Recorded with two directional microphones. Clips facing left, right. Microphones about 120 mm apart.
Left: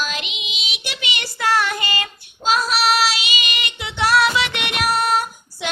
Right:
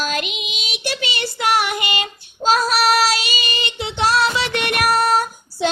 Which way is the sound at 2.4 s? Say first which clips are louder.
Right 3 dB; 40° right (ahead or behind).